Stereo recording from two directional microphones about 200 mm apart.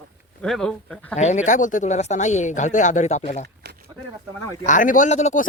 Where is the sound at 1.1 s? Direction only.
35° left (ahead or behind).